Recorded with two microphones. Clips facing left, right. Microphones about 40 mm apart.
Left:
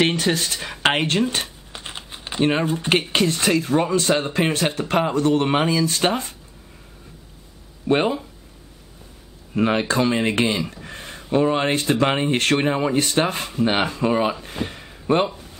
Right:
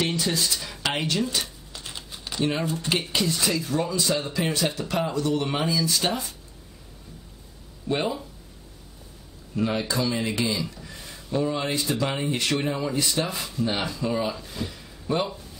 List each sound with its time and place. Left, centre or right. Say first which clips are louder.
0.0 s speech: left 6 dB; left
3.1 s speech: left 6 dB; left
7.9 s speech: left 7 dB; left
9.6 s speech: left 6 dB; left
14.4 s a sound: left 5 dB; left